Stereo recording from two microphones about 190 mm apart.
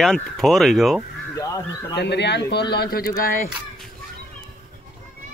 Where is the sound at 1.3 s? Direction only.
15° left (ahead or behind).